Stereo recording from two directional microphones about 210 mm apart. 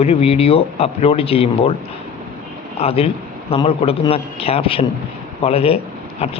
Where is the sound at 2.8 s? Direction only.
30° left (ahead or behind).